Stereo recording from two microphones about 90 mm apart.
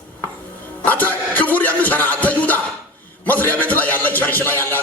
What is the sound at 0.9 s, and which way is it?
Music, 20° left (ahead or behind).